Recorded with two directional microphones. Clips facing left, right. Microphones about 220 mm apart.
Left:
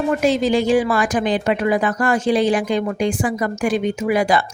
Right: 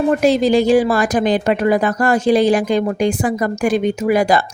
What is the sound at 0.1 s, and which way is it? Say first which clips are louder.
A woman's voice: right 3 dB; 35° right (ahead or behind).